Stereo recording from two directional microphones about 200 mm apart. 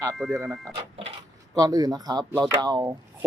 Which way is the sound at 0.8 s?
30° right (ahead or behind).